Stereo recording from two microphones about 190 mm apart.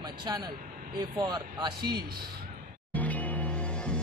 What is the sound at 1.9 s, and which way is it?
Speech, 55° right (ahead or behind).